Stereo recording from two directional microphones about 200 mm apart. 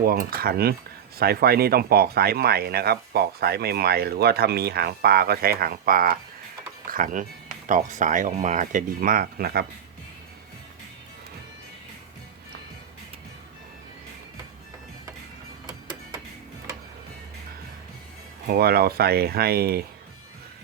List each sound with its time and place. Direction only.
0.0 s speech: 45° right (ahead or behind)
15.6 s music: 20° right (ahead or behind)
18.4 s speech: 50° right (ahead or behind)